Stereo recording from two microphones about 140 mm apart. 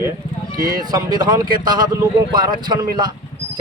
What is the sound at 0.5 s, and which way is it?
Speech, 90° right.